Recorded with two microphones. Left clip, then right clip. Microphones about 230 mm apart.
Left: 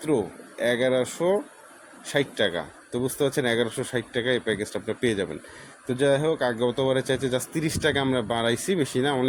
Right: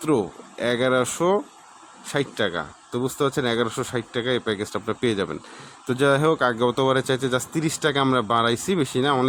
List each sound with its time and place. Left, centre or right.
0.0 s speech: centre